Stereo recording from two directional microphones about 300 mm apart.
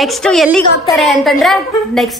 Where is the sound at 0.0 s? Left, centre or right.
Centre.